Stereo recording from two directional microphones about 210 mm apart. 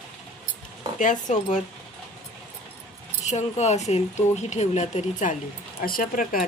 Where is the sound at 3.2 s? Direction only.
35° left (ahead or behind).